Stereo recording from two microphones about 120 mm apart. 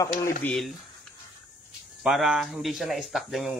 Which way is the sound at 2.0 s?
5° right (ahead or behind).